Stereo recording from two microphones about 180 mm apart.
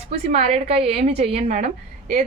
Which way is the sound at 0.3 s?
35° right (ahead or behind).